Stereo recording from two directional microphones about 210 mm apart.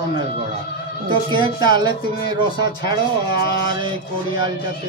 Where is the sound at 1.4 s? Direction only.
20° right (ahead or behind).